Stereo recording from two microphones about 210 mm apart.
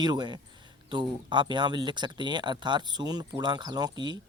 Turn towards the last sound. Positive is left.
turn(degrees=-20)  # may be behind; listen again after turning